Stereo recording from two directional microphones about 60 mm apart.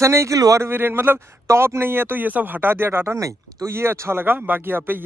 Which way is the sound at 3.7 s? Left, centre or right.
Right.